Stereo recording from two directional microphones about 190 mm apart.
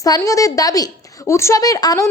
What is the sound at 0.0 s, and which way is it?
A woman's voice, 20° left (ahead or behind).